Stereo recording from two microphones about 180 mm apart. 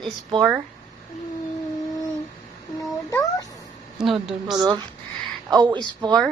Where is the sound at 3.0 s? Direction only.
20° left (ahead or behind).